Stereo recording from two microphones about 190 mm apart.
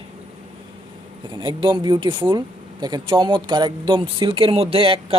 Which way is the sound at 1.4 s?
25° right (ahead or behind).